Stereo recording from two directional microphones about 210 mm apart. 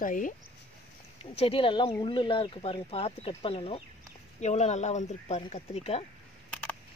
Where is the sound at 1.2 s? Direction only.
30° left (ahead or behind).